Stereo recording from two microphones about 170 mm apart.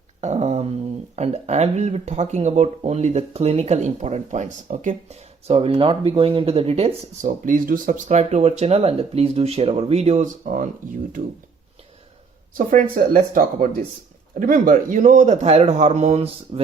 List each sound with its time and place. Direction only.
0.2 s a sound: 45° right (ahead or behind)
1.1 s speech: 40° right (ahead or behind)
7.3 s speech: 55° right (ahead or behind)
12.5 s speech: 50° right (ahead or behind)